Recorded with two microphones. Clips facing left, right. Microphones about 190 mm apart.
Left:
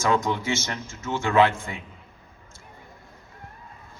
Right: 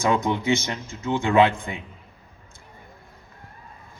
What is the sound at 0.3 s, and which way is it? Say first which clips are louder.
A man's voice: right 4 dB; 15° right (ahead or behind).